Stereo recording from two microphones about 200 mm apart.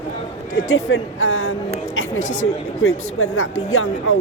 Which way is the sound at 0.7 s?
85° left.